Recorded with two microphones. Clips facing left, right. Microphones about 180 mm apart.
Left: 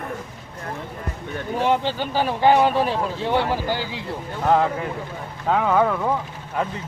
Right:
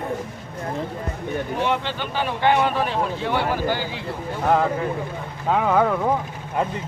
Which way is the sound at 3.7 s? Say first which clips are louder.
Even; 15° left (ahead or behind).